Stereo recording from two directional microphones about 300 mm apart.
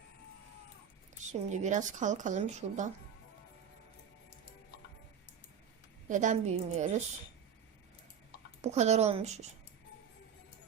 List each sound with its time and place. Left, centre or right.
1.3 s speech: right
6.1 s speech: right
8.6 s speech: right